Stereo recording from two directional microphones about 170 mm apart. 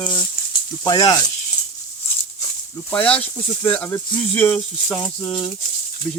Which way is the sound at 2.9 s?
5° left (ahead or behind).